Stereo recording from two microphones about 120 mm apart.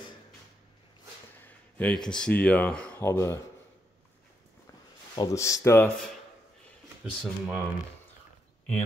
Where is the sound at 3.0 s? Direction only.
20° left (ahead or behind).